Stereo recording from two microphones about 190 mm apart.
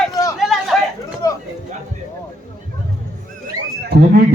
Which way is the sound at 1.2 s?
15° left (ahead or behind).